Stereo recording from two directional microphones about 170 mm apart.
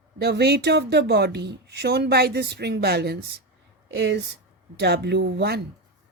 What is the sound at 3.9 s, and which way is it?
Speech, 90° right.